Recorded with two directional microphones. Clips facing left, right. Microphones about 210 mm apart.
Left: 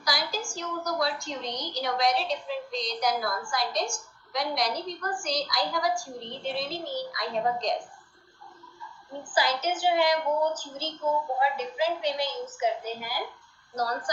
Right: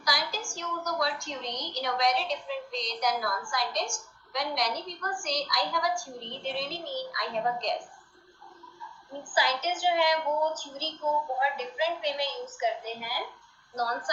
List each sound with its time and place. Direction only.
0.0 s a woman's voice: 35° left (ahead or behind)
9.3 s a woman's voice: 35° left (ahead or behind)